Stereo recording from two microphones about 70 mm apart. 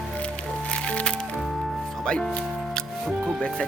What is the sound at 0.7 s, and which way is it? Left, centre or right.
Music, centre.